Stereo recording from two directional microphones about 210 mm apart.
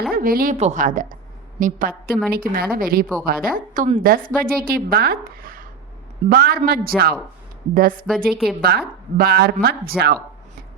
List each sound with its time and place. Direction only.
0.1 s a woman's voice: 45° right (ahead or behind)